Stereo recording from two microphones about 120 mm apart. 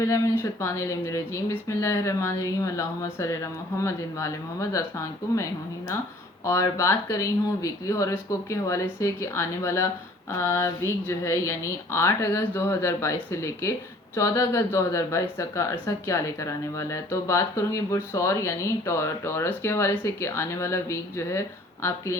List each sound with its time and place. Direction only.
0.0 s speech: 25° left (ahead or behind)